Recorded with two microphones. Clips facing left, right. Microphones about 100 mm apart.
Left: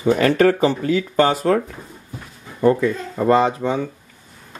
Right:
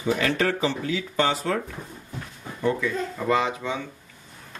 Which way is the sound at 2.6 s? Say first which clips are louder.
Left 8 dB; 45° left (ahead or behind).